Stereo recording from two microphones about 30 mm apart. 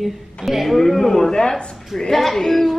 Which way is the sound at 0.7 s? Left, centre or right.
Centre.